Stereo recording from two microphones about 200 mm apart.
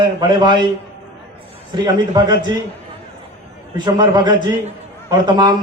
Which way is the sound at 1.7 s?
20° right (ahead or behind).